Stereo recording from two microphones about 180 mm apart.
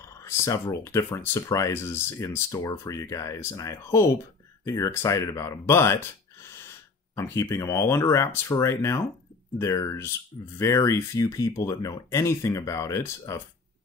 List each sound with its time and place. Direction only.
0.0 s speech: 15° left (ahead or behind)
7.2 s speech: 15° left (ahead or behind)